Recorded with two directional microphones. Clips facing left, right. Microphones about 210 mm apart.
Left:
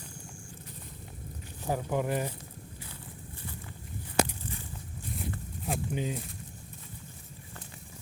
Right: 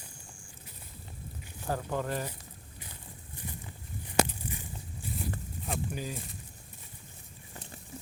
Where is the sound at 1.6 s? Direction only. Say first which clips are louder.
Left 3 dB; 15° left (ahead or behind).